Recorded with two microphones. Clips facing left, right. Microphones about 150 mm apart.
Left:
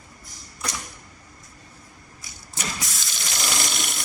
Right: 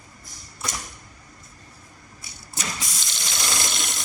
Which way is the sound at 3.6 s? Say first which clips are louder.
Left 1 dB; 20° right (ahead or behind).